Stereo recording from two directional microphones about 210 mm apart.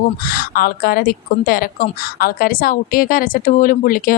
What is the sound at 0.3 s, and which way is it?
Speech, 45° left (ahead or behind).